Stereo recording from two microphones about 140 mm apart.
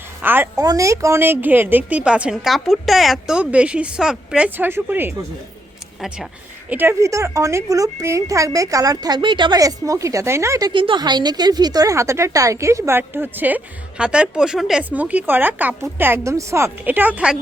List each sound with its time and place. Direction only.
0.2 s a child's voice: 15° right (ahead or behind)
0.5 s a woman's voice: 25° right (ahead or behind)
6.7 s a woman's voice: 15° right (ahead or behind)
10.7 s a woman's voice: 35° right (ahead or behind); by 17.3 s 10° right (ahead or behind)